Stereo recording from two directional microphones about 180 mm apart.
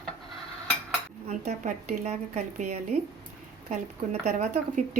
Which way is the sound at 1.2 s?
40° right (ahead or behind).